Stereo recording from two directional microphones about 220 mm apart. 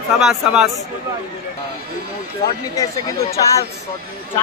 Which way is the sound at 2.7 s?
15° left (ahead or behind).